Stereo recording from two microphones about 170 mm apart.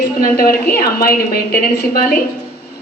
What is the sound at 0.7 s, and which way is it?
A woman's voice, 60° left (ahead or behind).